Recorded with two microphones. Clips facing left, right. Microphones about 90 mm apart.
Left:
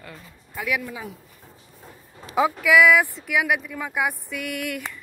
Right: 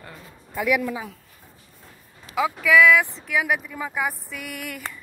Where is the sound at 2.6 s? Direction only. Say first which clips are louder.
Right 1 dB; 15° left (ahead or behind).